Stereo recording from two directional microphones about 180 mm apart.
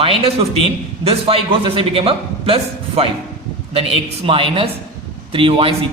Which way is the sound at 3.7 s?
30° right (ahead or behind).